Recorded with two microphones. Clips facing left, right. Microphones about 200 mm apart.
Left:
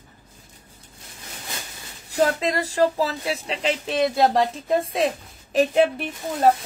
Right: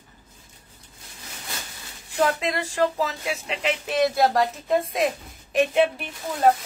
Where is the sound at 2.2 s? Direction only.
35° left (ahead or behind).